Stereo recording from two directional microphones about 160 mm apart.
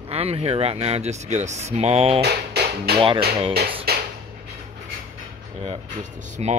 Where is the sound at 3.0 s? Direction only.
35° right (ahead or behind).